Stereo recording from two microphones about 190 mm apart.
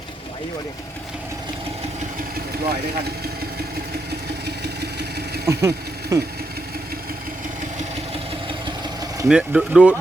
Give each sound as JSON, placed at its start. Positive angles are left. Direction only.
{"t": 4.4, "sound": "vehicle", "side_deg": -60}
{"t": 5.5, "sound": "speech", "side_deg": -15}
{"t": 7.8, "sound": "vehicle", "side_deg": -30}
{"t": 9.2, "sound": "speech", "side_deg": -5}